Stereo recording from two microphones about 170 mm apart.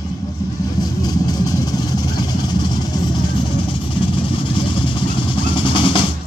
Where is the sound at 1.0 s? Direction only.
25° left (ahead or behind).